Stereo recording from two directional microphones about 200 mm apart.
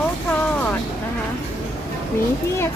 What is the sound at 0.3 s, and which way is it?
Vehicle, 10° left (ahead or behind).